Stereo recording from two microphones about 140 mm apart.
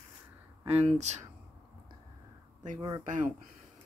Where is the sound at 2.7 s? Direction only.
25° right (ahead or behind).